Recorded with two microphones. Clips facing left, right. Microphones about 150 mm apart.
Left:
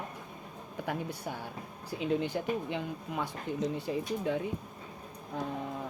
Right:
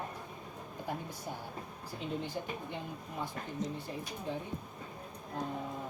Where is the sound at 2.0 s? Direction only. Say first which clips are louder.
Left 7 dB; 75° left (ahead or behind).